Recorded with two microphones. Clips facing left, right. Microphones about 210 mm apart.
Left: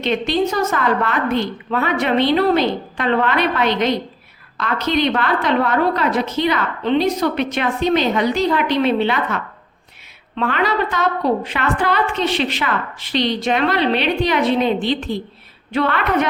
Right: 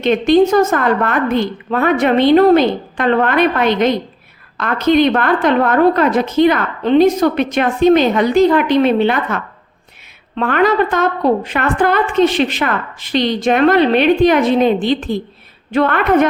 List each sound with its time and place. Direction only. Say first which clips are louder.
0.0 s a woman's voice: right 7 dB; 50° right (ahead or behind)